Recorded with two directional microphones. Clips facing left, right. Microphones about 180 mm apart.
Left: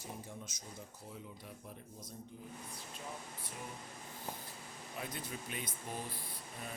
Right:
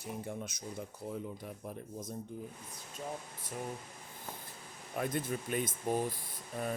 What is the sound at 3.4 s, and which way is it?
Speech, 45° right (ahead or behind).